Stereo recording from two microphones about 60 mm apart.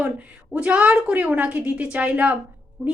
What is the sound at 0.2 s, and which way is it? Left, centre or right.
A woman's voice, centre.